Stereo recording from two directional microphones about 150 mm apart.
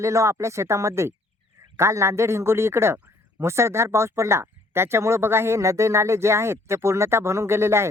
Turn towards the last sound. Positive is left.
turn(degrees=-15)  # may be behind; listen again after turning